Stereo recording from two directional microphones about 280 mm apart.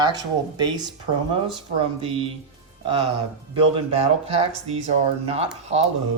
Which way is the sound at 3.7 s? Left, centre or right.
Right.